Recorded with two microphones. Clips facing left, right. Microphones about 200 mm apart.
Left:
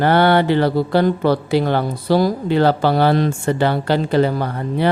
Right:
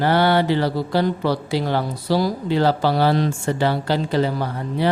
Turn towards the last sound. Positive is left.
turn(degrees=55)  # may be behind; listen again after turning